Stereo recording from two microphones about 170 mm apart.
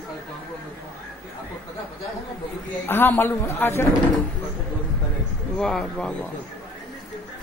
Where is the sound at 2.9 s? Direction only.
15° left (ahead or behind).